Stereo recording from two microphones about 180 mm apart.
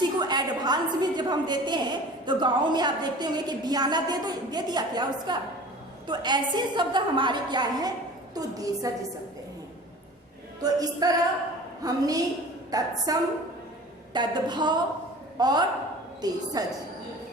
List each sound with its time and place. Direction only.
0.2 s a woman's voice: 25° right (ahead or behind)
10.6 s a woman's voice: 20° right (ahead or behind)